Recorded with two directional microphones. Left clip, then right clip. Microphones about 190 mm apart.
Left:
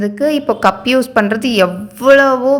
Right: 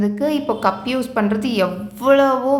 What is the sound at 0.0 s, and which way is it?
A woman's voice, 30° left (ahead or behind).